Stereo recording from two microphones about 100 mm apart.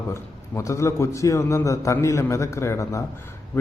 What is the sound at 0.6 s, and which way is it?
A man's voice, 30° left (ahead or behind).